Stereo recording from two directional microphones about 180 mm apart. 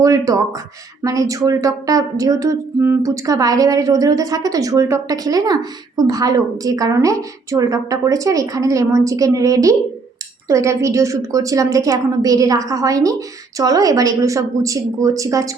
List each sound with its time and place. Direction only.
0.0 s a woman's voice: 20° right (ahead or behind)